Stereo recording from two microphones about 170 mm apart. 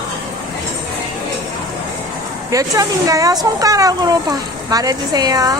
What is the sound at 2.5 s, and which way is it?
Speech, 20° right (ahead or behind).